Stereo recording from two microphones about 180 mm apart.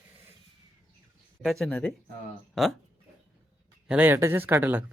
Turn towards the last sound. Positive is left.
turn(degrees=-10)  # may be behind; listen again after turning